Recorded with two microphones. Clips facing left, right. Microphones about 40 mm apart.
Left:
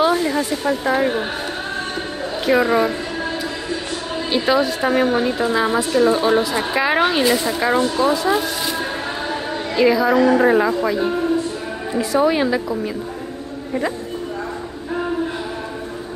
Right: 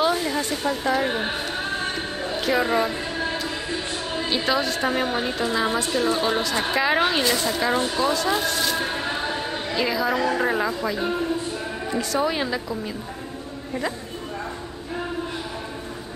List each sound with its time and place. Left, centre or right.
0.0 s speech: centre
2.5 s a woman's voice: centre
4.3 s a woman's voice: centre
9.8 s a woman's voice: centre